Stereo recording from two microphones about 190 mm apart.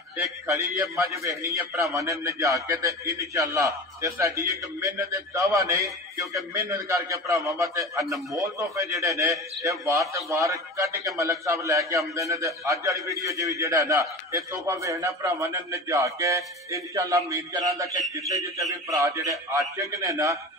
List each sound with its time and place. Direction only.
0.2 s a man's voice: 15° right (ahead or behind)